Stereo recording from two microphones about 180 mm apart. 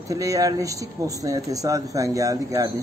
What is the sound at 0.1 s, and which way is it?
Speech, 20° right (ahead or behind).